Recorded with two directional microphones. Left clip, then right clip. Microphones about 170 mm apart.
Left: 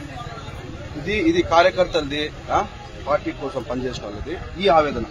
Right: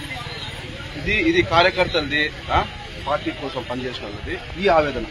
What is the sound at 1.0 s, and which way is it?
Speech, 75° left (ahead or behind).